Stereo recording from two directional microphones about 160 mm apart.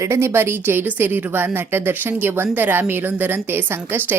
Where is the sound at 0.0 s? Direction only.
15° right (ahead or behind).